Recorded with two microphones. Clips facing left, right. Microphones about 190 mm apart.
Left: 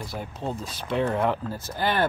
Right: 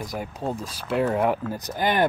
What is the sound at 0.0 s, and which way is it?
Speech, 15° right (ahead or behind).